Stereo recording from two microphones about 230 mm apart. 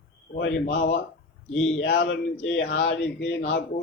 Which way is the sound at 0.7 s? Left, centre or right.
Left.